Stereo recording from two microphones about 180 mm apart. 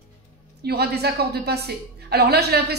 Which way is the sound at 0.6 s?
65° right (ahead or behind).